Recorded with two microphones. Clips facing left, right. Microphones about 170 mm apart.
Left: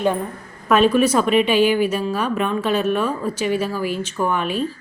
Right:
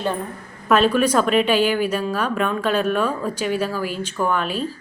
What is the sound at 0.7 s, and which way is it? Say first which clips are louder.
Speech: left 2 dB; 10° left (ahead or behind).